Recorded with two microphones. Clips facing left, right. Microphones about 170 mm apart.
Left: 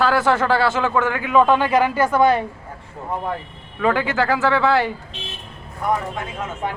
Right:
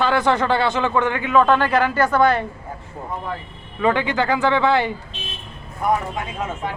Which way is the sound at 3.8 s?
5° left (ahead or behind).